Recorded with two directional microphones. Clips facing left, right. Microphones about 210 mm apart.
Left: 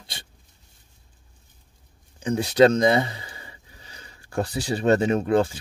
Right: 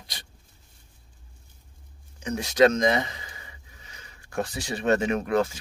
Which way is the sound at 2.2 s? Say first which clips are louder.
Left 3 dB; 30° left (ahead or behind).